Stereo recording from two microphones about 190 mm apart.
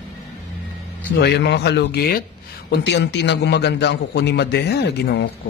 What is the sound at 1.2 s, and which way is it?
A man's voice, 60° left (ahead or behind).